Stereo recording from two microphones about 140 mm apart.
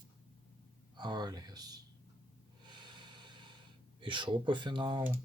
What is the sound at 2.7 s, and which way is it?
Snort, 35° right (ahead or behind).